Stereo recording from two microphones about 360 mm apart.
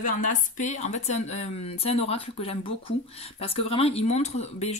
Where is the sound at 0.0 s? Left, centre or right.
Left.